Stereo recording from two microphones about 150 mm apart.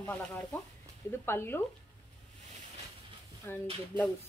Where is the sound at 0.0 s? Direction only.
10° left (ahead or behind).